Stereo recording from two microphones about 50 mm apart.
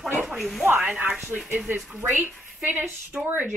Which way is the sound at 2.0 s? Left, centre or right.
Right.